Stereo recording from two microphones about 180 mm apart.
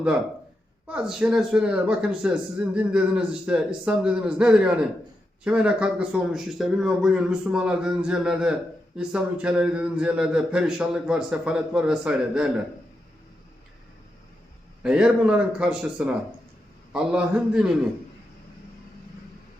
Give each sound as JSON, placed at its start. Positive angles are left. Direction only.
{"t": 0.9, "sound": "speech", "side_deg": -5}
{"t": 14.8, "sound": "speech", "side_deg": -5}